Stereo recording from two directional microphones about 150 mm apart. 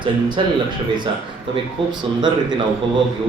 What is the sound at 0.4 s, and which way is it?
Speech, 35° right (ahead or behind).